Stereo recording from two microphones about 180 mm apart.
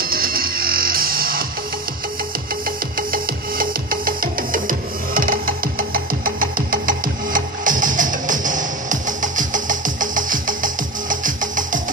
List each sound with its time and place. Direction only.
0.0 s music: 55° right (ahead or behind)
3.0 s music: 55° right (ahead or behind)